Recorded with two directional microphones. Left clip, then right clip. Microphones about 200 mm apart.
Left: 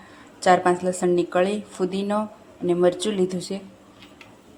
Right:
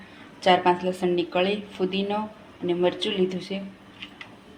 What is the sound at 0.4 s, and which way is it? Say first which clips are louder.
A woman's voice: left 2 dB; 15° left (ahead or behind).